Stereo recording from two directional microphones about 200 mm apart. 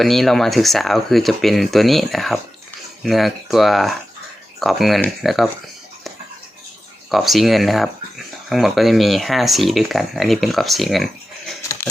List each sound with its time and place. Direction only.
0.0 s speech: centre (ahead or behind)
7.1 s speech: centre (ahead or behind)